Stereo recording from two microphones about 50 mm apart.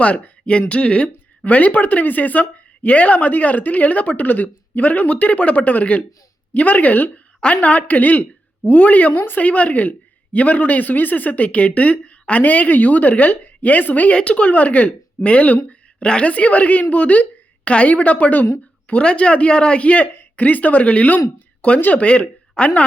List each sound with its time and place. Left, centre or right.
0.0 s a woman's voice: left